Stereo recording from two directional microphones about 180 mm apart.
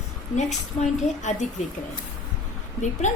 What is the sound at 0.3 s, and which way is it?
A woman's voice, 40° left (ahead or behind).